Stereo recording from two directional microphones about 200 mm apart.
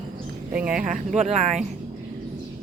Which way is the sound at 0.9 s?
40° right (ahead or behind).